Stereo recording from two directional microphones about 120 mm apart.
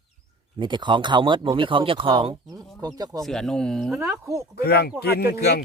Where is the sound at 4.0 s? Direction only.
25° right (ahead or behind).